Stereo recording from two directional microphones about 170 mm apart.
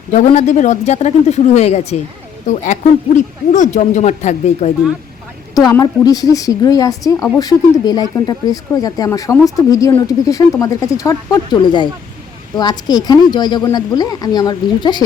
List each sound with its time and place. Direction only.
0.1 s speech: 45° left (ahead or behind)
3.2 s speech: 45° left (ahead or behind)
5.5 s speech: 25° left (ahead or behind)